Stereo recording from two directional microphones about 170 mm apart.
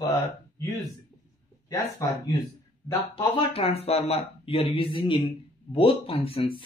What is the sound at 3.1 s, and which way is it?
Speech, 35° left (ahead or behind).